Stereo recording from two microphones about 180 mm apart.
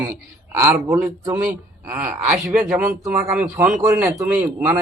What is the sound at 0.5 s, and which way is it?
Speech, 10° right (ahead or behind).